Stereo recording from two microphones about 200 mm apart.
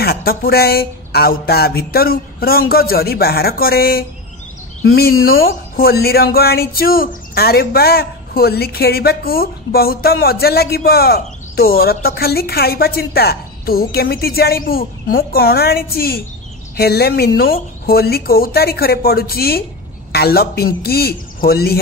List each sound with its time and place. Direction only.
0.0 s speech: 50° left (ahead or behind)